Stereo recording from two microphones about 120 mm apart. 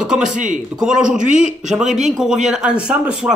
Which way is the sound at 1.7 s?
5° right (ahead or behind).